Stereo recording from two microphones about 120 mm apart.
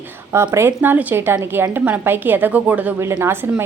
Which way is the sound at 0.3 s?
20° right (ahead or behind).